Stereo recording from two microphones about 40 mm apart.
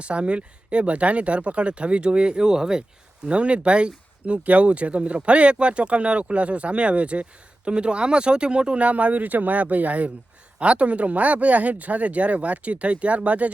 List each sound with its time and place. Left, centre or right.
0.0 s speech: right